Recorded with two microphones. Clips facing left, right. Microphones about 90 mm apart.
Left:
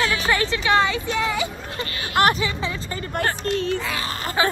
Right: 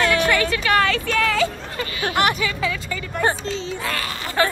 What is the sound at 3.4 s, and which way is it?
Speech, 60° left (ahead or behind).